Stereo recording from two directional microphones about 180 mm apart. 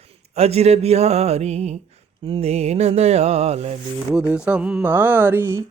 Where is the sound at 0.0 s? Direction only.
35° right (ahead or behind).